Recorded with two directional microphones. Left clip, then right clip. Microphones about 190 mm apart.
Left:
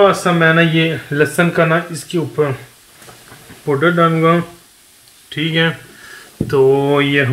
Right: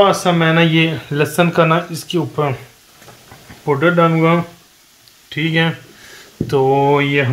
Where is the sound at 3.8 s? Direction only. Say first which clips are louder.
Left 1 dB; 65° right (ahead or behind).